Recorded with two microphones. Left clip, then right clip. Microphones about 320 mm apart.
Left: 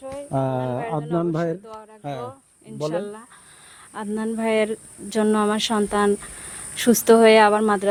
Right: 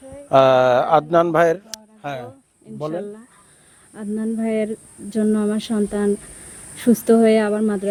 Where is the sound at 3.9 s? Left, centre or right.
Left.